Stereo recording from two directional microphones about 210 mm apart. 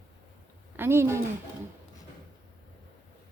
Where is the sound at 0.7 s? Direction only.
10° right (ahead or behind).